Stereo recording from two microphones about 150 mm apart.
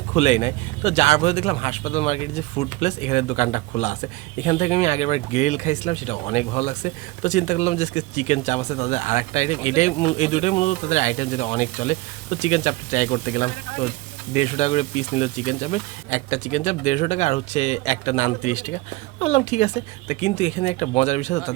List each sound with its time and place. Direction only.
0.1 s speech: 45° left (ahead or behind)